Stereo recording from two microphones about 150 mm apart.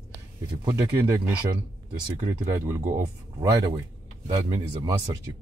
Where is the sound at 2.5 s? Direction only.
15° right (ahead or behind).